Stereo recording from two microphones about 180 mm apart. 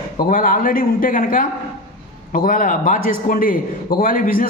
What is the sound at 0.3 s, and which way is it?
A man's voice, 50° left (ahead or behind).